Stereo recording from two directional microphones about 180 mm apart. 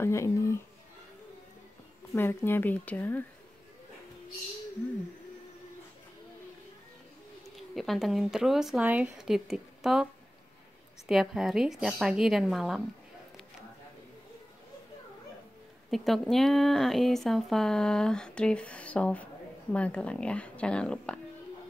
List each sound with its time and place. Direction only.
0.0 s speech: 15° left (ahead or behind)
2.1 s speech: 10° left (ahead or behind)
7.5 s speech: centre (ahead or behind)
11.1 s speech: centre (ahead or behind)
15.9 s speech: centre (ahead or behind)